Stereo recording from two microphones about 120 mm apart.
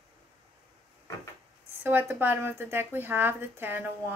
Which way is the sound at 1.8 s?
15° right (ahead or behind).